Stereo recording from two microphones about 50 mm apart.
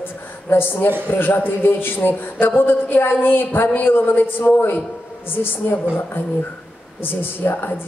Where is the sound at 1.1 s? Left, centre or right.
Left.